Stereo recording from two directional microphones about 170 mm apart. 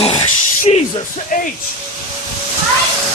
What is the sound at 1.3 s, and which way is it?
Speech, 50° left (ahead or behind).